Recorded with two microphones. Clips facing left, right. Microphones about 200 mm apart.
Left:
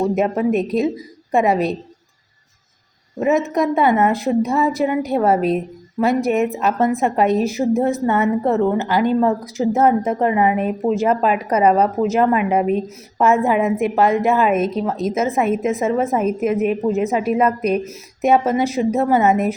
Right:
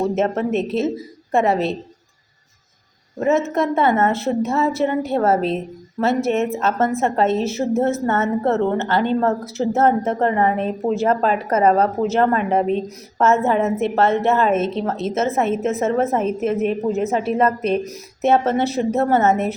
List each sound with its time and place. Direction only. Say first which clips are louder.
0.1 s a woman's voice: left 2 dB; 15° left (ahead or behind)
3.2 s a woman's voice: left 1 dB; 15° left (ahead or behind)